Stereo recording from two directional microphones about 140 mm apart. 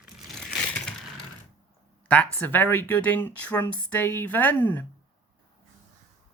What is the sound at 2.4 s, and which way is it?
Speech, 15° left (ahead or behind).